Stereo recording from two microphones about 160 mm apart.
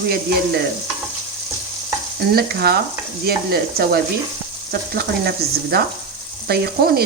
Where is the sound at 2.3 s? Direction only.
75° right (ahead or behind).